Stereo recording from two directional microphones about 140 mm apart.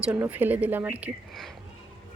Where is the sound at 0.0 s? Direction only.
10° right (ahead or behind).